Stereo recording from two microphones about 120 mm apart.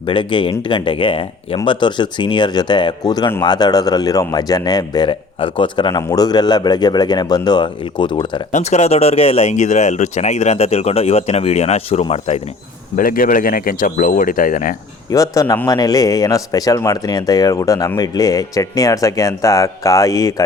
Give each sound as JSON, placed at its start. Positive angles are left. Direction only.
{"t": 0.0, "sound": "speech", "side_deg": 45}
{"t": 6.0, "sound": "speech", "side_deg": 30}
{"t": 8.5, "sound": "speech", "side_deg": 65}
{"t": 13.9, "sound": "speech", "side_deg": 90}
{"t": 15.1, "sound": "speech", "side_deg": 30}